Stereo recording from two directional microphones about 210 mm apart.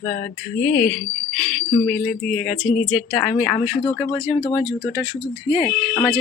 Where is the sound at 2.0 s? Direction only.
5° left (ahead or behind).